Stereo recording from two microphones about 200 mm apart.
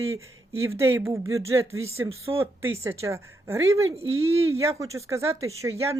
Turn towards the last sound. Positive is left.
turn(degrees=-15)  # may be behind; listen again after turning